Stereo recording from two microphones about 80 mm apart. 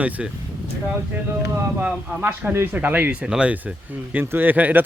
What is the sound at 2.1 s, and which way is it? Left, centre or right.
Speech, right.